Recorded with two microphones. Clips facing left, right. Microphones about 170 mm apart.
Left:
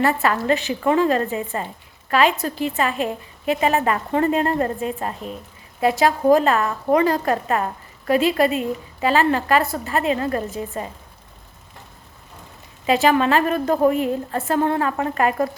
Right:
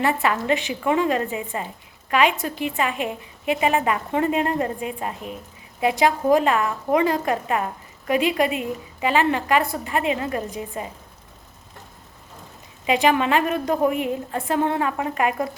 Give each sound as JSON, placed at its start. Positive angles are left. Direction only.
{"t": 0.0, "sound": "a woman's voice", "side_deg": -15}
{"t": 12.8, "sound": "a woman's voice", "side_deg": -15}